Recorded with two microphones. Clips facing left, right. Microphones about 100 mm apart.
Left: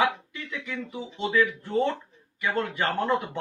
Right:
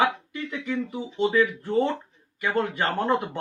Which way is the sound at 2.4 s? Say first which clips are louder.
Right 2 dB; 20° right (ahead or behind).